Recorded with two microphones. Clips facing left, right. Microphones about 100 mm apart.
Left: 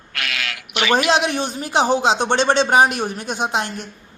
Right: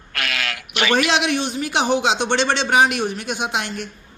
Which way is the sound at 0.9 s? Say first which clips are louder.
Left 2 dB; 40° left (ahead or behind).